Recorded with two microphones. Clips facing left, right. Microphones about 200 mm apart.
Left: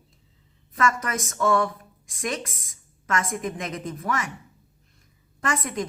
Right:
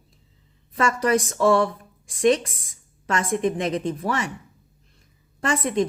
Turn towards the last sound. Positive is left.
turn(degrees=-30)  # may be behind; listen again after turning